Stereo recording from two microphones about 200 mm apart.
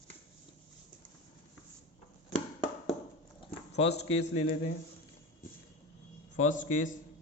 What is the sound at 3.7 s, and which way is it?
Speech, 30° left (ahead or behind).